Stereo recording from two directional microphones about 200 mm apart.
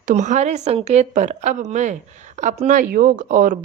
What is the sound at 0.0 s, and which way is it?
Speech, 35° right (ahead or behind).